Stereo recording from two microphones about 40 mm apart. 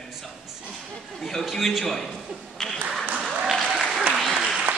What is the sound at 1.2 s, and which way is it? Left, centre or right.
A man's voice, centre.